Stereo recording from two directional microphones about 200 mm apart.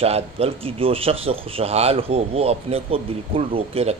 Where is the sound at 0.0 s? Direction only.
30° right (ahead or behind).